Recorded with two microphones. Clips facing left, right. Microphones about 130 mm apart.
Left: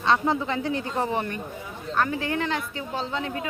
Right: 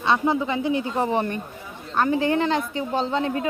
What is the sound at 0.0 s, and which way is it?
A woman's voice, 10° right (ahead or behind).